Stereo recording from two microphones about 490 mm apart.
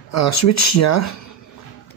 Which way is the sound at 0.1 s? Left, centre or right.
Left.